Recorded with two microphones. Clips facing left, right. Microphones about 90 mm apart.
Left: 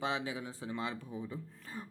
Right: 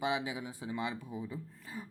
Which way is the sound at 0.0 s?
15° right (ahead or behind).